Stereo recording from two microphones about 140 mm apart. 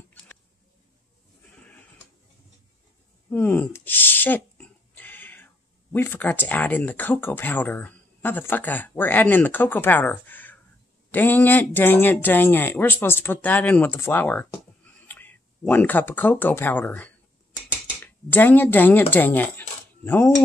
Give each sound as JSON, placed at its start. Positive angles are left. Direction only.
{"t": 3.3, "sound": "speech", "side_deg": 15}